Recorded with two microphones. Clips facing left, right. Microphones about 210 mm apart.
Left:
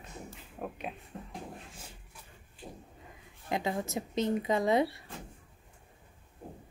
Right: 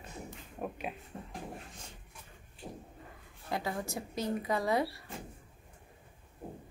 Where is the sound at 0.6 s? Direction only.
Centre (ahead or behind).